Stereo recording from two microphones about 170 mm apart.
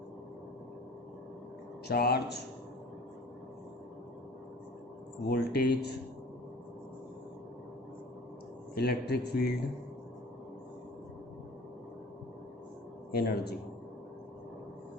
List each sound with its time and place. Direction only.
1.9 s a man's voice: 65° left (ahead or behind)
5.3 s a man's voice: 70° left (ahead or behind)
8.7 s a man's voice: 75° left (ahead or behind)
13.1 s a man's voice: 70° left (ahead or behind)